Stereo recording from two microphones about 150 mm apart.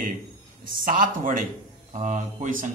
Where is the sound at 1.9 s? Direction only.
55° right (ahead or behind).